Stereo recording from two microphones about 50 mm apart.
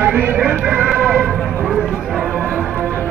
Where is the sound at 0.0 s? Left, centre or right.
Right.